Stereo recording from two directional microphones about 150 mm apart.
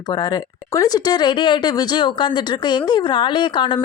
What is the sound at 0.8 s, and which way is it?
Speech, 25° left (ahead or behind).